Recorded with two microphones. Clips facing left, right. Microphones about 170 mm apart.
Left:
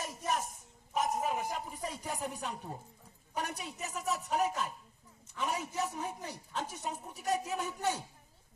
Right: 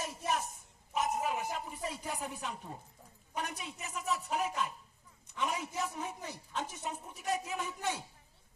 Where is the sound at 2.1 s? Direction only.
40° left (ahead or behind).